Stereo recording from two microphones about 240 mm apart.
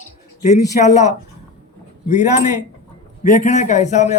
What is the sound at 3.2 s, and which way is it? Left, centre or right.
Speech, left.